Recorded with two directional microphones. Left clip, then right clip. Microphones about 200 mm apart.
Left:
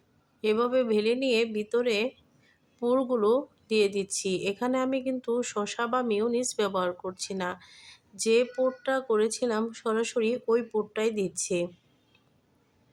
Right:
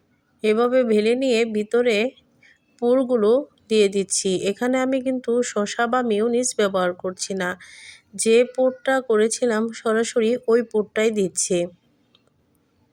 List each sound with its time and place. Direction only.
0.4 s speech: 20° right (ahead or behind)